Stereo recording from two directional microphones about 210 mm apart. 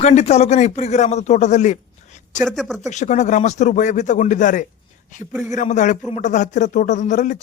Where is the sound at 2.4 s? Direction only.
Centre (ahead or behind).